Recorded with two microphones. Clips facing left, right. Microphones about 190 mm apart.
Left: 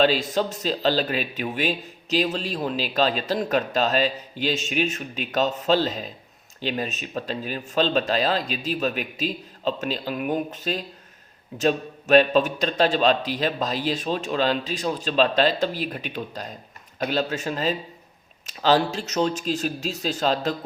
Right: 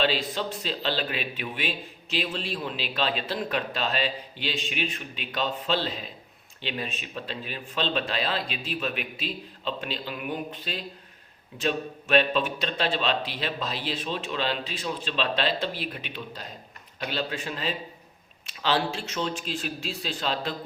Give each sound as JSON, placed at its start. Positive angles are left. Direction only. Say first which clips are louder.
{"t": 0.0, "sound": "speech", "louder": "left 6 dB", "side_deg": 45}